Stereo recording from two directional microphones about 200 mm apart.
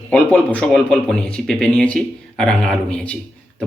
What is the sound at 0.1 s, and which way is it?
Speech, 5° left (ahead or behind).